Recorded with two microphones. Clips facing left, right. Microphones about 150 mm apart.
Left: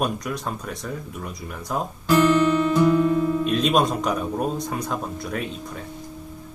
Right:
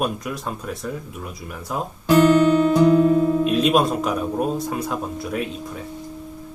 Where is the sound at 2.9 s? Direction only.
30° right (ahead or behind).